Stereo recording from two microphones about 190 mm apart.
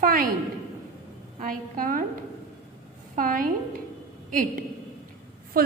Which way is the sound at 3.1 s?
45° right (ahead or behind).